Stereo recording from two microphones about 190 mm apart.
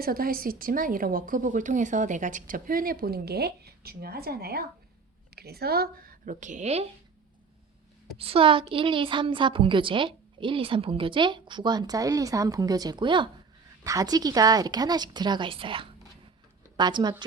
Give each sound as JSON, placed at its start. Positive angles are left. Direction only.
{"t": 0.0, "sound": "a woman's voice", "side_deg": -50}
{"t": 8.2, "sound": "a woman's voice", "side_deg": -30}